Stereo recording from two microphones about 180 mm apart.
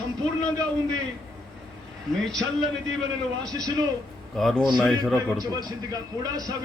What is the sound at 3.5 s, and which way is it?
Speech, 20° right (ahead or behind).